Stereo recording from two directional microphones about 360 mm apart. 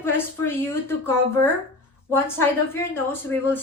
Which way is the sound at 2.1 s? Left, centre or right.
Centre.